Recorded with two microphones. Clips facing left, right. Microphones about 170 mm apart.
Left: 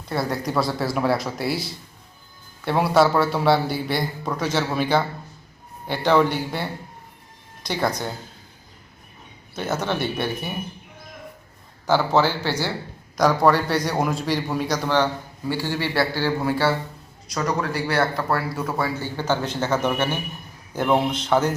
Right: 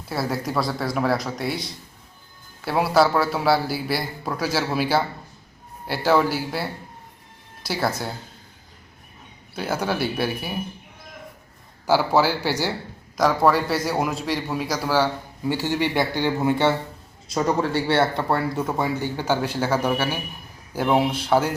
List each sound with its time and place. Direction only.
0.1 s a man's voice: centre (ahead or behind)
9.6 s speech: 10° right (ahead or behind)
11.9 s speech: 10° right (ahead or behind)
13.1 s a man's voice: centre (ahead or behind)